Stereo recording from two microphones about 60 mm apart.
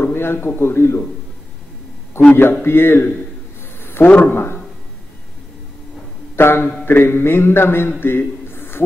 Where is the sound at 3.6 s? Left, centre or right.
Left.